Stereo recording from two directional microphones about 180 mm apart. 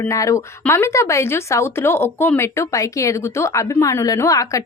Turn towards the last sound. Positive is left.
turn(degrees=15)  # may be behind; listen again after turning